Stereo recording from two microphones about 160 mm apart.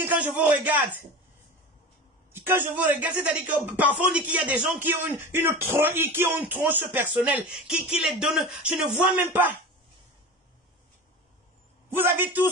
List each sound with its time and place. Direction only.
0.0 s speech: 10° right (ahead or behind)
2.3 s speech: 10° right (ahead or behind)
12.0 s speech: 15° right (ahead or behind)